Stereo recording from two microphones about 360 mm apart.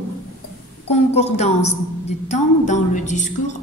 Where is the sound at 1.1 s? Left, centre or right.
Centre.